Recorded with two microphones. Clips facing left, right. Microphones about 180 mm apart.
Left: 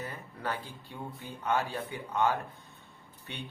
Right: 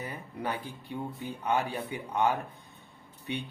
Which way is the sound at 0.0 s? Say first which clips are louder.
Right 2 dB; 15° right (ahead or behind).